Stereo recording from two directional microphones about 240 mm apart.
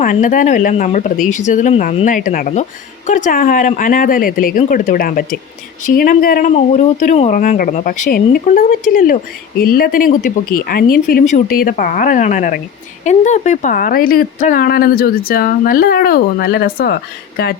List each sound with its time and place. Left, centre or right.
0.0 s speech: left